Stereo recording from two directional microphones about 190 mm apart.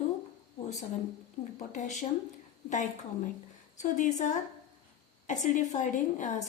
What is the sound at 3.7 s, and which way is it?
A woman's voice, 40° left (ahead or behind).